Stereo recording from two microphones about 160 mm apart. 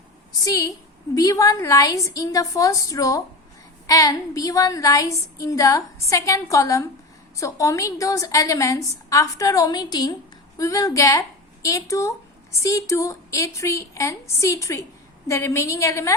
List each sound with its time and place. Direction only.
0.4 s a woman's voice: 20° left (ahead or behind)